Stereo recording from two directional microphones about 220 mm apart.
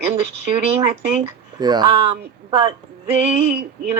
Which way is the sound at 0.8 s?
15° right (ahead or behind).